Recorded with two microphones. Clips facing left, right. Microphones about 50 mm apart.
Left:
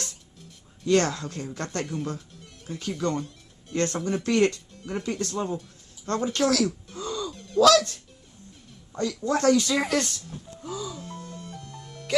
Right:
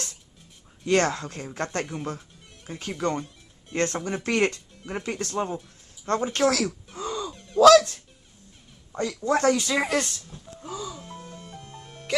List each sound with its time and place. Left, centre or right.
0.8 s speech: right
2.0 s music: centre
3.0 s speech: right
7.0 s gasp: right
7.3 s a sound: centre
7.6 s speech: centre
10.6 s music: centre; by 12.1 s right